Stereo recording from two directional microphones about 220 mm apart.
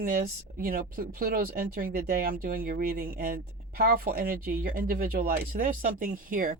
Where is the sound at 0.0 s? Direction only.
40° right (ahead or behind).